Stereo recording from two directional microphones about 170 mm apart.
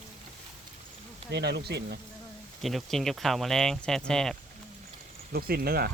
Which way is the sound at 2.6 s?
Centre (ahead or behind).